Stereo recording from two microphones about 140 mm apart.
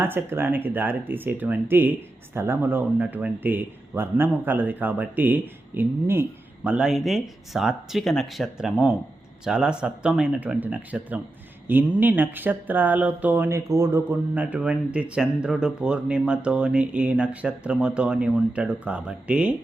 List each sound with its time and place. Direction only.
0.0 s speech: 15° right (ahead or behind)